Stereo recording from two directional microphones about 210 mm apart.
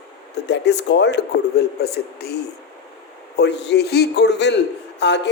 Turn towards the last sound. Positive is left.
turn(degrees=55)  # may be behind; listen again after turning